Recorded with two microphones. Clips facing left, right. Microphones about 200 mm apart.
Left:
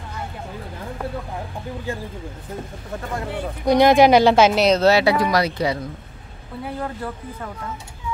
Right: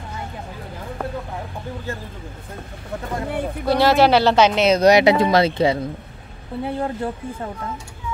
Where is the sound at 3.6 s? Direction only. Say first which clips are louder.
Left 3 dB; 15° left (ahead or behind).